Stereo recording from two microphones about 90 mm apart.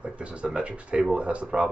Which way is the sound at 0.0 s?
15° right (ahead or behind).